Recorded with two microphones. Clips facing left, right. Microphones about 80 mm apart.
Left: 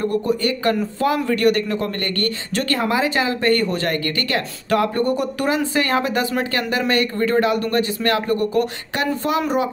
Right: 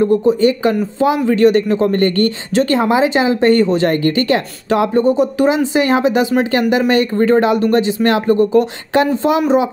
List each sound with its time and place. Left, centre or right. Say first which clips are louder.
0.0 s a man's voice: right 8 dB; centre